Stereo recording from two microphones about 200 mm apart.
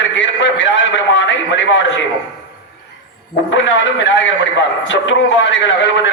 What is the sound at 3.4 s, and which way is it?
A man's voice, 70° left (ahead or behind).